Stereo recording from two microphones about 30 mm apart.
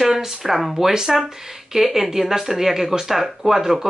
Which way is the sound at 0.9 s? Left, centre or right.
Centre.